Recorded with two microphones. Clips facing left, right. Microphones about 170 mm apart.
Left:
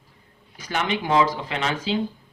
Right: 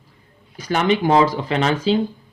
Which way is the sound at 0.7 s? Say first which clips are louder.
Right 6 dB; 40° right (ahead or behind).